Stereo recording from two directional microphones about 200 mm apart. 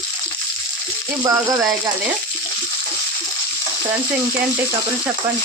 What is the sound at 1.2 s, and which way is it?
Speech, 15° right (ahead or behind).